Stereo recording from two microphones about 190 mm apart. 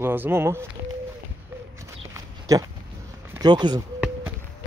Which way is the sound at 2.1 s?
20° right (ahead or behind).